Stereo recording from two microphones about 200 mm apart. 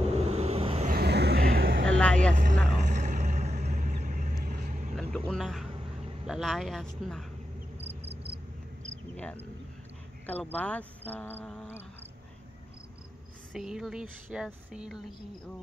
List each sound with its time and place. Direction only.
0.0 s vehicle: 30° right (ahead or behind)
0.9 s vehicle: 55° right (ahead or behind)
2.3 s vehicle: 40° right (ahead or behind)
4.9 s vehicle: centre (ahead or behind)
6.2 s speech: centre (ahead or behind)
7.8 s cricket: 30° right (ahead or behind)
9.1 s cricket: 5° left (ahead or behind)
10.2 s speech: 10° left (ahead or behind)
13.5 s speech: centre (ahead or behind)